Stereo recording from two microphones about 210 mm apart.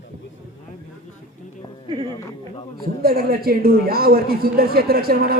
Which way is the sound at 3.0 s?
45° right (ahead or behind).